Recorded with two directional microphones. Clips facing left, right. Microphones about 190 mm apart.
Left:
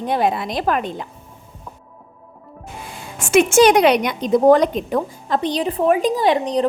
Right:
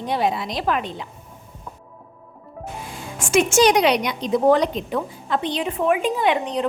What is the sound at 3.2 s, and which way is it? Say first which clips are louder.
A woman's voice: left 4 dB; 60° left (ahead or behind).